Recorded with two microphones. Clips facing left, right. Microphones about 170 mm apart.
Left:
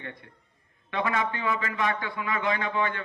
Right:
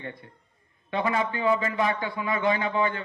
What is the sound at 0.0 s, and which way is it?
A man's voice, 25° right (ahead or behind).